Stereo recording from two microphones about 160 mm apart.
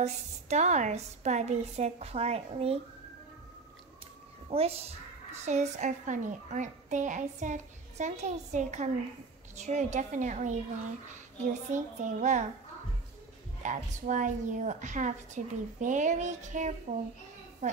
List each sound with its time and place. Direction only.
0.0 s a woman's voice: 45° right (ahead or behind)
4.5 s a woman's voice: 40° right (ahead or behind)
13.6 s a woman's voice: 50° right (ahead or behind)